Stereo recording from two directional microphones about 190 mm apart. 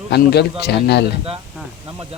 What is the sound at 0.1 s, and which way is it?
Speech, 60° left (ahead or behind).